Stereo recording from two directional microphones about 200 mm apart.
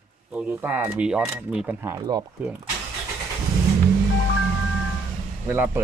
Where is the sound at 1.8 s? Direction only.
15° right (ahead or behind).